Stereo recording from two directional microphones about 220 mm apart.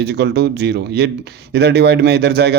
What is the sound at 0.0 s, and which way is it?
Speech, 45° right (ahead or behind).